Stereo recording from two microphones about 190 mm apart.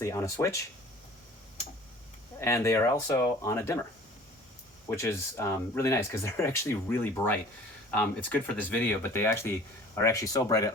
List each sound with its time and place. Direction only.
0.0 s speech: 15° left (ahead or behind)
2.4 s speech: 15° left (ahead or behind)
4.9 s speech: 15° left (ahead or behind)